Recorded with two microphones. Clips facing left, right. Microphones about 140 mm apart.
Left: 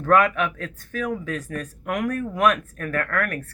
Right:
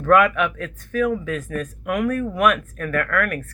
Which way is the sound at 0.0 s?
35° left (ahead or behind).